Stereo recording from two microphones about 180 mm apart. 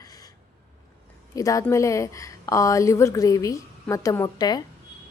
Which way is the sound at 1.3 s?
20° left (ahead or behind).